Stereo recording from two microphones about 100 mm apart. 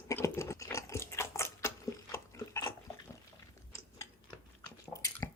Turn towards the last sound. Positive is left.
turn(degrees=35)  # may be behind; listen again after turning